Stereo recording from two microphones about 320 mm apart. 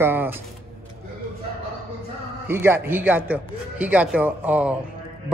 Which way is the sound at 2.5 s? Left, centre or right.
Centre.